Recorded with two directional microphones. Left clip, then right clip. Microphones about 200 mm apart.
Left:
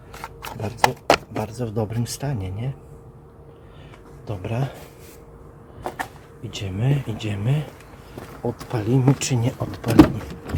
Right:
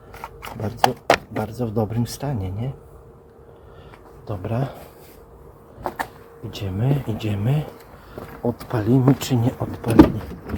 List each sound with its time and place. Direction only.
0.5 s speech: centre (ahead or behind)
4.3 s speech: 5° left (ahead or behind)
6.5 s speech: centre (ahead or behind)
9.8 s power windows: 25° left (ahead or behind)